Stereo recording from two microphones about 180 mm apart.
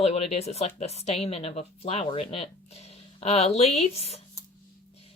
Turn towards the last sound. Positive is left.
turn(degrees=35)  # may be behind; listen again after turning